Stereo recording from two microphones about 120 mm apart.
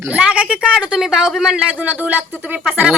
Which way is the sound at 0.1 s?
10° right (ahead or behind).